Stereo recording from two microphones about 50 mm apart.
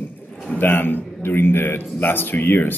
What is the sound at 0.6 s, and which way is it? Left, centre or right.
A man's voice, left.